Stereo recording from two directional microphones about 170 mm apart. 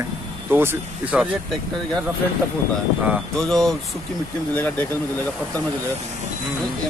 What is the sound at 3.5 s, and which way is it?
Speech, centre (ahead or behind).